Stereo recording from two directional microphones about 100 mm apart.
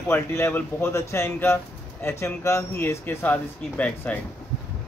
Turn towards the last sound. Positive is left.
turn(degrees=15)  # may be behind; listen again after turning